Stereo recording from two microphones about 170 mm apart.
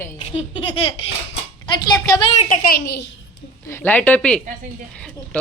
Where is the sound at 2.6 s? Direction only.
70° left (ahead or behind).